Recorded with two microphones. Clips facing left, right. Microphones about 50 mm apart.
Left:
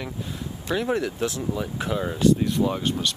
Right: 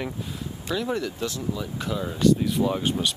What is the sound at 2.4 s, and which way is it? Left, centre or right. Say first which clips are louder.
Speech: even; centre.